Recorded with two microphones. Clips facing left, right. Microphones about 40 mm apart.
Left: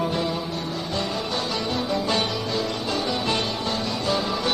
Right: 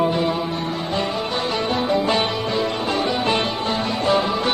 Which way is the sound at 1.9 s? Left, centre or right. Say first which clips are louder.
Right 5 dB; right.